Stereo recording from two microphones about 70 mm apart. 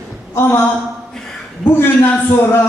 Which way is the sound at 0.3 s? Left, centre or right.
Left.